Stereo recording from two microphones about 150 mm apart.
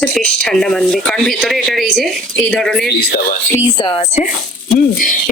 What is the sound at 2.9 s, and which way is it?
Speech, 90° left.